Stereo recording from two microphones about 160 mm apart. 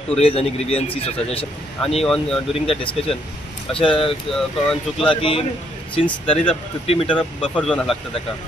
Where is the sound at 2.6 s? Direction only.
35° left (ahead or behind).